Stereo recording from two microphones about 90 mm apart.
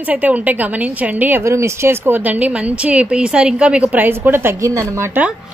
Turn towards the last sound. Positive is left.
turn(degrees=-30)  # may be behind; listen again after turning